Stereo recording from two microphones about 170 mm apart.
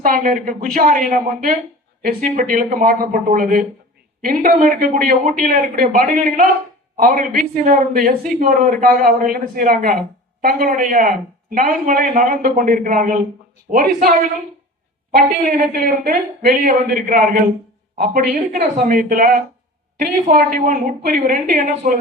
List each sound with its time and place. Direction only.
0.0 s a man's voice: 50° right (ahead or behind)